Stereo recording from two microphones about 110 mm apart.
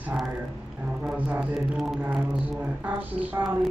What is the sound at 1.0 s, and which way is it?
A woman's voice, 15° right (ahead or behind).